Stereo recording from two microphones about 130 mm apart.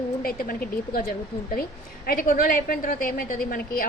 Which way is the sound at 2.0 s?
90° left.